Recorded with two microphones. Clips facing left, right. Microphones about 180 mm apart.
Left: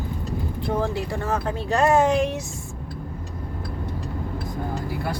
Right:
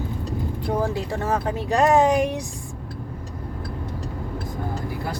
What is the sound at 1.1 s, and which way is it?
Speech, 15° right (ahead or behind).